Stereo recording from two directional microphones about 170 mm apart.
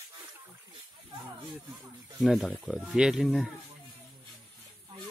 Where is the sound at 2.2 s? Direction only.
Centre (ahead or behind).